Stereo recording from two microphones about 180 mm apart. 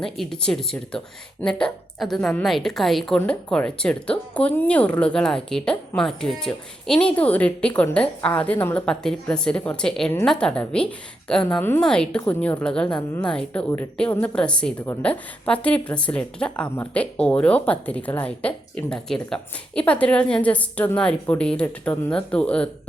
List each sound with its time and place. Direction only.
0.0 s a woman's voice: 5° left (ahead or behind)